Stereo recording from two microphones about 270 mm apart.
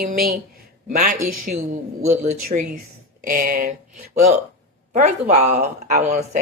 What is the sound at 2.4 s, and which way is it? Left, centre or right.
Speech, right.